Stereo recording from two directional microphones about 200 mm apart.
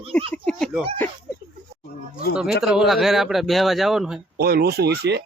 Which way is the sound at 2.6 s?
5° right (ahead or behind).